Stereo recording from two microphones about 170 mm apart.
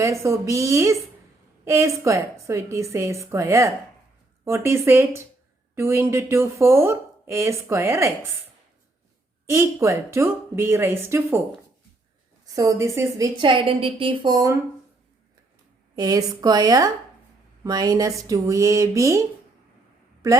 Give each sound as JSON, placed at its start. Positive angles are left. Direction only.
{"t": 0.0, "sound": "speech", "side_deg": -15}
{"t": 9.5, "sound": "speech", "side_deg": -15}
{"t": 12.5, "sound": "a woman's voice", "side_deg": -20}
{"t": 16.0, "sound": "a woman's voice", "side_deg": -20}
{"t": 20.2, "sound": "a woman's voice", "side_deg": -20}